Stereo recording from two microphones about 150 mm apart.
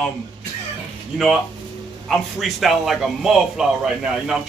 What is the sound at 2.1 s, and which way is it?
A man's voice, centre (ahead or behind).